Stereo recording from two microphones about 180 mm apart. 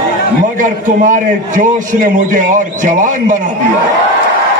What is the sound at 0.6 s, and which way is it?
A man's voice, 45° right (ahead or behind).